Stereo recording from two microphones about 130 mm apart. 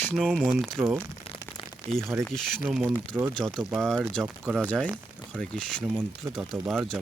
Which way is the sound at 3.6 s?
15° right (ahead or behind).